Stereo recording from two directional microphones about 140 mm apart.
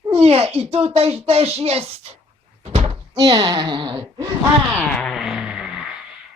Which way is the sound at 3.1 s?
30° right (ahead or behind).